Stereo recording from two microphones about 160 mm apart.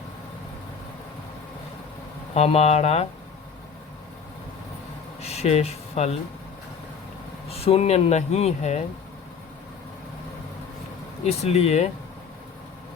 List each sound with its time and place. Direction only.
2.3 s speech: 40° left (ahead or behind)
5.2 s speech: 40° left (ahead or behind)
7.5 s speech: 40° left (ahead or behind)
11.2 s speech: 40° left (ahead or behind)